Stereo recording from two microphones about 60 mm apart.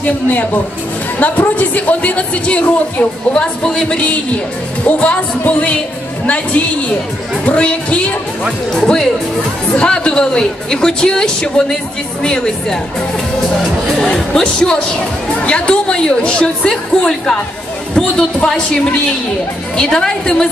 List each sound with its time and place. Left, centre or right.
0.0 s speech: left
9.7 s a woman's voice: centre
13.9 s a woman's voice: centre